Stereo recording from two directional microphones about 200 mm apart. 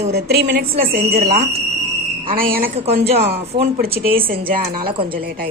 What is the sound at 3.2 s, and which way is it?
Speech, 50° right (ahead or behind).